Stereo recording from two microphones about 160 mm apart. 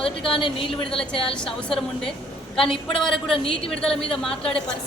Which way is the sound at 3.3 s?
35° left (ahead or behind).